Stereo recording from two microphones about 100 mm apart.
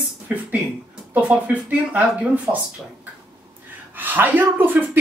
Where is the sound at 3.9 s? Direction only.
20° right (ahead or behind).